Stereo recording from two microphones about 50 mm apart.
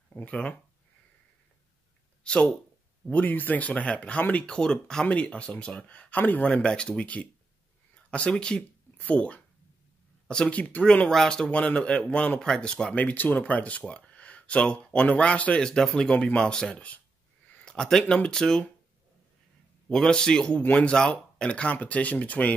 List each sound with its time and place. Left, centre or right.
0.1 s speech: left
2.2 s speech: left
3.1 s speech: left
4.5 s a man's voice: centre
5.0 s speech: left
6.6 s speech: centre
8.9 s speech: left
10.6 s speech: left
11.2 s a man's voice: left
12.9 s a man's voice: left; by 16.7 s centre
16.7 s speech: left
17.6 s a man's voice: centre
19.9 s a man's voice: centre; by 22.5 s left